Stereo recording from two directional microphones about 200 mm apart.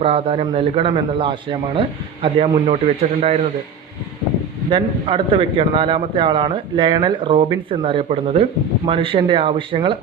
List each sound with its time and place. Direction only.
0.0 s a man's voice: 30° right (ahead or behind)
4.7 s a man's voice: 25° right (ahead or behind)